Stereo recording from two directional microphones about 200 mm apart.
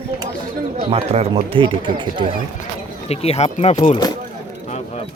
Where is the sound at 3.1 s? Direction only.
30° left (ahead or behind).